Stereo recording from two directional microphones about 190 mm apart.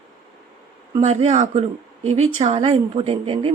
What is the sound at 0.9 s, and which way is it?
Speech, 30° right (ahead or behind).